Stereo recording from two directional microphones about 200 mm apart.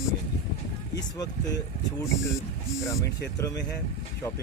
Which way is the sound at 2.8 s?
15° left (ahead or behind).